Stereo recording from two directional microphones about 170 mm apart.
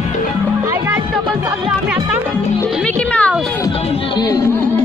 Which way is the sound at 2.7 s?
5° left (ahead or behind).